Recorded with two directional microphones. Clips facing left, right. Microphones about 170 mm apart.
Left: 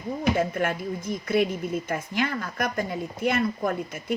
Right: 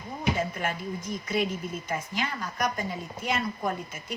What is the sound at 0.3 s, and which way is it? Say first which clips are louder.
Speech: left 5 dB; 55° left (ahead or behind).